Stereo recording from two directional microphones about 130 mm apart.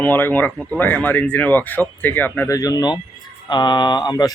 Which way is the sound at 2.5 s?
30° left (ahead or behind).